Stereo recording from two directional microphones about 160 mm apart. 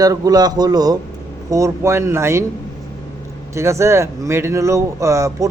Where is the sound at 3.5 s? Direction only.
15° right (ahead or behind).